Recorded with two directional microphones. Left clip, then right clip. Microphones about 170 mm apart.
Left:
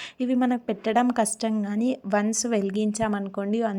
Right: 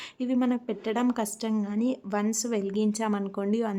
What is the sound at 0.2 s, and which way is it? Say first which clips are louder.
A woman's voice: left 3 dB; 20° left (ahead or behind).